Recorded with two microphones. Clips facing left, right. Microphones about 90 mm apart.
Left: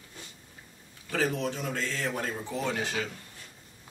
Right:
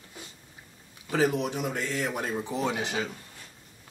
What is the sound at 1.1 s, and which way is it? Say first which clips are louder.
Speech: right 4 dB; 15° right (ahead or behind).